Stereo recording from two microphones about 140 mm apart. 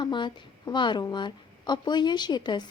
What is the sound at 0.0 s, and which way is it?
A woman's voice, 35° left (ahead or behind).